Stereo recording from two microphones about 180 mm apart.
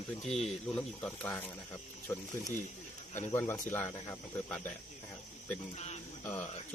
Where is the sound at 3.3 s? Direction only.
15° left (ahead or behind).